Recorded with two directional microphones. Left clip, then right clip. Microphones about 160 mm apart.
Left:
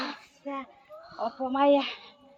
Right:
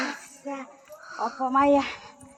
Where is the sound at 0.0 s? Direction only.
5° left (ahead or behind).